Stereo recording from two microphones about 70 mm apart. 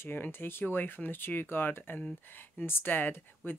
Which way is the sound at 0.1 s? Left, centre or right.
Left.